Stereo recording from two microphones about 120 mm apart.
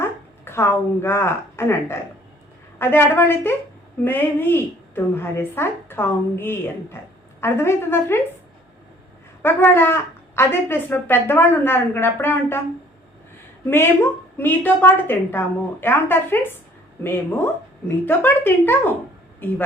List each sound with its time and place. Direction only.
0.0 s a woman's voice: 20° left (ahead or behind)
9.4 s a woman's voice: 20° left (ahead or behind)
13.7 s a woman's voice: 20° left (ahead or behind)